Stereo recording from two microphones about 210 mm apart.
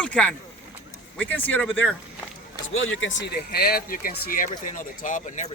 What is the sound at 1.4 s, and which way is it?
Speech, 10° left (ahead or behind).